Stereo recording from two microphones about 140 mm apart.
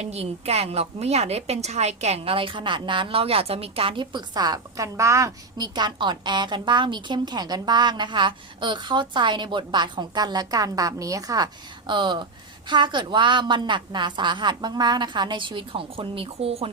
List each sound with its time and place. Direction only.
0.0 s a woman's voice: 50° right (ahead or behind)